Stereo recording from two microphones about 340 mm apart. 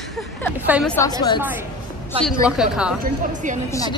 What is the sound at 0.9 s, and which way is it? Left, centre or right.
Speech, centre.